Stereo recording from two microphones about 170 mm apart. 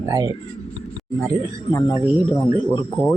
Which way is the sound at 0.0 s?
20° right (ahead or behind).